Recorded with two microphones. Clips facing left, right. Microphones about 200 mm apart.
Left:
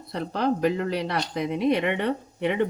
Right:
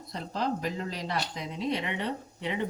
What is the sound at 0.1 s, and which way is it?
Speech, 65° left (ahead or behind).